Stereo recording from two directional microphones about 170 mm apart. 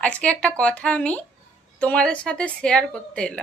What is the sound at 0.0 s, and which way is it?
Speech, 5° left (ahead or behind).